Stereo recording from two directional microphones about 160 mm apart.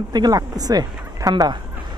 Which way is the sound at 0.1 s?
25° right (ahead or behind).